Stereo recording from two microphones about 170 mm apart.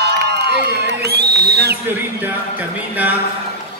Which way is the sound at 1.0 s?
70° right (ahead or behind).